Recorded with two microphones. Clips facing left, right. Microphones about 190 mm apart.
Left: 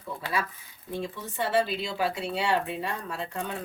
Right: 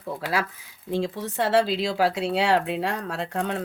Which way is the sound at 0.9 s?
90° right.